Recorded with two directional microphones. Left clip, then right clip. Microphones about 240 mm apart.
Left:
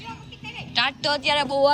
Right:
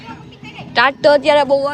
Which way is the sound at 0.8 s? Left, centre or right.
Centre.